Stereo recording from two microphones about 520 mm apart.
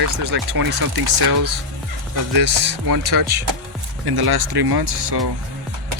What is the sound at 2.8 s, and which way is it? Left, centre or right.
Speech, right.